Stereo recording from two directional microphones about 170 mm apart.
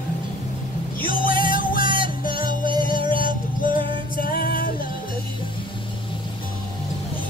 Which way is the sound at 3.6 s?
55° left (ahead or behind).